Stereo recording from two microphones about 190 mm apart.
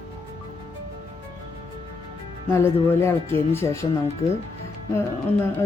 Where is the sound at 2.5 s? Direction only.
10° left (ahead or behind).